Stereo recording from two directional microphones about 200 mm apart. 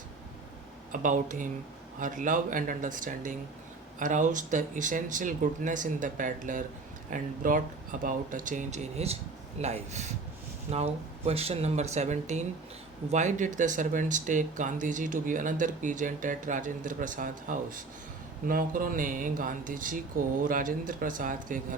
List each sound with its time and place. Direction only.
0.9 s speech: 40° right (ahead or behind)